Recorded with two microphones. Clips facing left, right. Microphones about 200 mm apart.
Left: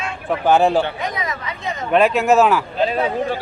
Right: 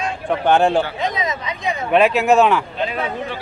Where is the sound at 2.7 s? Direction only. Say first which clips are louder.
Left 4 dB; 35° left (ahead or behind).